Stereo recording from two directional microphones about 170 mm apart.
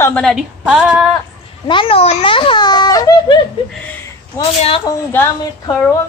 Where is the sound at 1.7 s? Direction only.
30° left (ahead or behind).